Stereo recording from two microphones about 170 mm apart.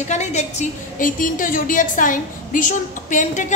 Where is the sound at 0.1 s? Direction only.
40° left (ahead or behind).